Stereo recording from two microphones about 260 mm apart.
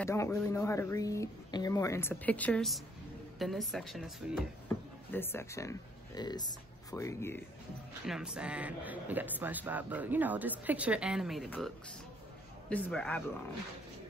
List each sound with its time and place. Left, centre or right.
0.0 s speech: centre
5.1 s speech: centre
8.1 s speech: centre